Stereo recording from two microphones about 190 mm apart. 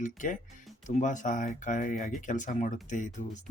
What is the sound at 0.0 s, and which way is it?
Speech, 45° left (ahead or behind).